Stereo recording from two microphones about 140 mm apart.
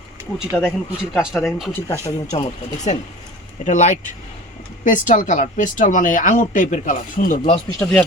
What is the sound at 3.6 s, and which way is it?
Speech, 60° left (ahead or behind).